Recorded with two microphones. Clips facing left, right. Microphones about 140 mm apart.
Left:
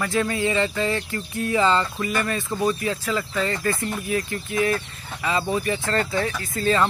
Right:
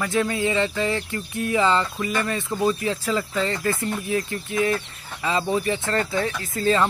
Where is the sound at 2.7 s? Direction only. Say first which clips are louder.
Right 1 dB; 30° right (ahead or behind).